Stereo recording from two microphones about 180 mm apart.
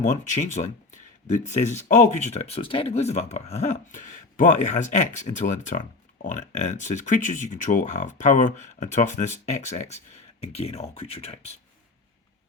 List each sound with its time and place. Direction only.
0.0 s speech: 40° left (ahead or behind)